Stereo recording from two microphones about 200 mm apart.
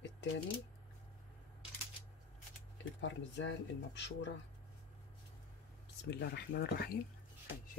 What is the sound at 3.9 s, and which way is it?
Speech, 60° left (ahead or behind).